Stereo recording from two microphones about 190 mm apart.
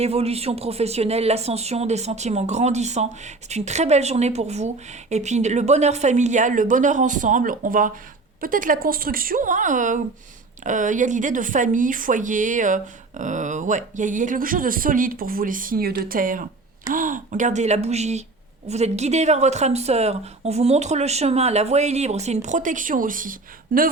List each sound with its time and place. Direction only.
0.0 s speech: 30° right (ahead or behind)